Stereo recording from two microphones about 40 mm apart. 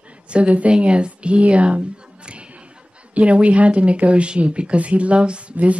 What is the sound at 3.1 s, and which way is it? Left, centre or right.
Speech, right.